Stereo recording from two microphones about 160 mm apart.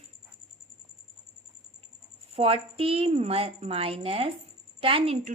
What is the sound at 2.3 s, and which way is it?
A woman's voice, 35° right (ahead or behind).